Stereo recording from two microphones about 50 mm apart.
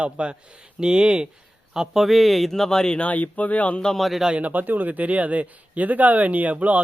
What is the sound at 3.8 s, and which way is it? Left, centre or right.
Speech, centre.